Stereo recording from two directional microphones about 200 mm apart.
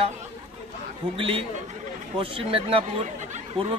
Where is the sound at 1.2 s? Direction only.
25° right (ahead or behind).